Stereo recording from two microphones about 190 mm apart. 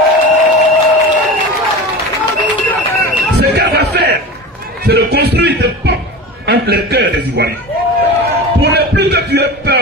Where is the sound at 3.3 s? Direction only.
60° right (ahead or behind).